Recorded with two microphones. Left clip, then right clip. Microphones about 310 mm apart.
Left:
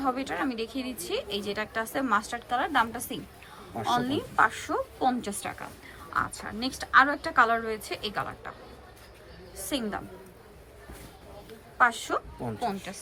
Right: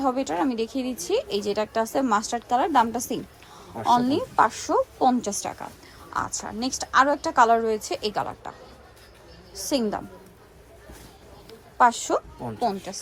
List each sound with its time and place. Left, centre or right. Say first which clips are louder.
0.0 s a woman's voice: right 5 dB; centre
3.8 s speech: right 7 dB; centre
4.0 s a woman's voice: right 4 dB; centre
9.6 s a woman's voice: right 7 dB; centre
11.8 s a woman's voice: right 5 dB; centre